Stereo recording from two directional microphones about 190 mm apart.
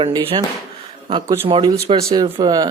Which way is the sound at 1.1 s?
20° right (ahead or behind).